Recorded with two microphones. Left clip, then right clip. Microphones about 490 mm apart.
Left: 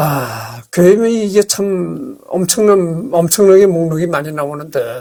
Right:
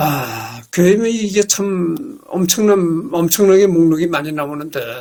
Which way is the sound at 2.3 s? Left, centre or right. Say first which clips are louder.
Left 3 dB; left.